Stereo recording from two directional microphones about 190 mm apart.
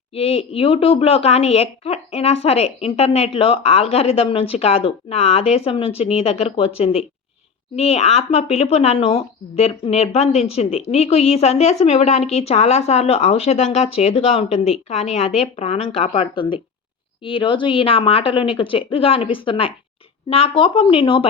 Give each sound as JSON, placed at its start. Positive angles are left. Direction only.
{"t": 0.1, "sound": "a woman's voice", "side_deg": 30}